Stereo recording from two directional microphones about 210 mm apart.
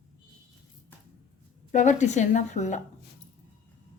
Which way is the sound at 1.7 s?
35° left (ahead or behind).